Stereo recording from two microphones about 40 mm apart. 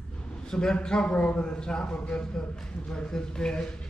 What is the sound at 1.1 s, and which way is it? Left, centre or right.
Speech, left.